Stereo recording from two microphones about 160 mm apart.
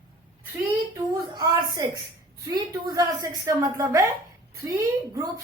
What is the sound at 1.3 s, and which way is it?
Speech, 20° right (ahead or behind).